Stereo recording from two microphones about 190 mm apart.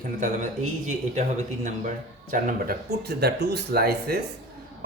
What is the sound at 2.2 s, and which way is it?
Speech, 50° right (ahead or behind).